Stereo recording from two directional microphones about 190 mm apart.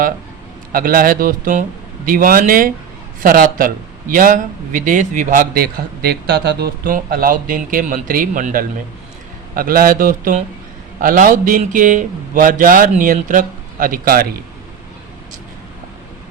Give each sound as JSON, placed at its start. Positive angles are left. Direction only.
{"t": 0.7, "sound": "a man's voice", "side_deg": -45}